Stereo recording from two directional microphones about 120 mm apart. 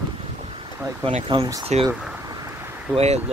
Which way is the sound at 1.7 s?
70° right (ahead or behind).